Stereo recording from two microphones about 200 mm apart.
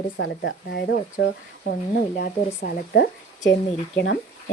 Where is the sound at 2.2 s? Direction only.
50° left (ahead or behind).